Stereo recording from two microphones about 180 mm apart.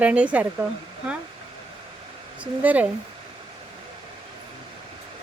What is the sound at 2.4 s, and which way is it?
Speech, 10° right (ahead or behind).